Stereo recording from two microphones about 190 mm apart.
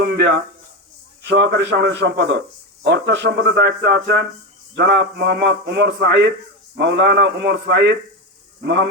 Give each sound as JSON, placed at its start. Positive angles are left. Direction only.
{"t": 0.0, "sound": "a sound", "side_deg": -55}
{"t": 1.3, "sound": "a man's voice", "side_deg": -60}
{"t": 3.2, "sound": "a man's voice", "side_deg": -55}